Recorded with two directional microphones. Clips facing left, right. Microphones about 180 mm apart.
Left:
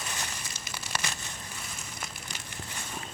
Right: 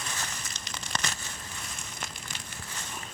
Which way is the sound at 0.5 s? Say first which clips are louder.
Even; 5° left (ahead or behind).